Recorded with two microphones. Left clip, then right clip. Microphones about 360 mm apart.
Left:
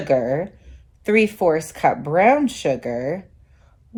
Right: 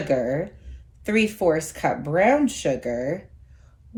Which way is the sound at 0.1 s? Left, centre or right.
Left.